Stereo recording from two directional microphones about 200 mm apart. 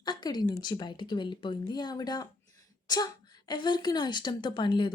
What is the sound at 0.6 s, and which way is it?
Speech, 20° left (ahead or behind).